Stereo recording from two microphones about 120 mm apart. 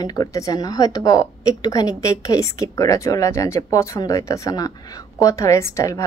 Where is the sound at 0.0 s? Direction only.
30° left (ahead or behind).